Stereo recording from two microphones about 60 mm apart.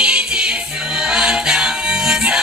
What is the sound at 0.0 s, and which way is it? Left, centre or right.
Music, centre.